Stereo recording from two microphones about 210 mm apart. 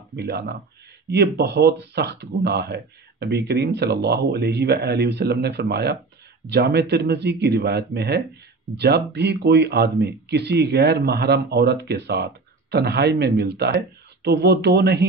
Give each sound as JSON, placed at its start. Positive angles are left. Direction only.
{"t": 0.1, "sound": "speech", "side_deg": -55}